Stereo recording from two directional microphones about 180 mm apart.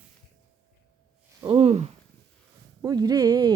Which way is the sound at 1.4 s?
35° right (ahead or behind).